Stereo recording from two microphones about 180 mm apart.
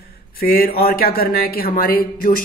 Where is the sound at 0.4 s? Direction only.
55° left (ahead or behind).